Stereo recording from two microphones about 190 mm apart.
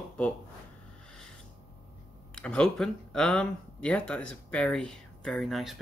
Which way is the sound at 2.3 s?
5° left (ahead or behind).